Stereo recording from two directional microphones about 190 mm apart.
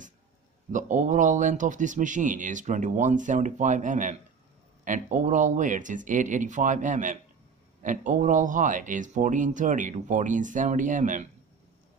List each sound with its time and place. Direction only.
0.7 s speech: 40° right (ahead or behind)